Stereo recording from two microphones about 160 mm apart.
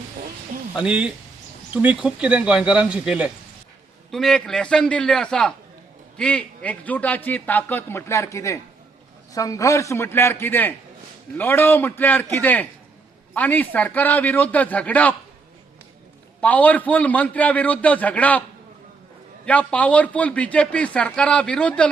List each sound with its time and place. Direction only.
0.8 s a man's voice: 5° right (ahead or behind); by 15.1 s 10° left (ahead or behind)
16.4 s a man's voice: 10° left (ahead or behind)
19.5 s a man's voice: 10° left (ahead or behind)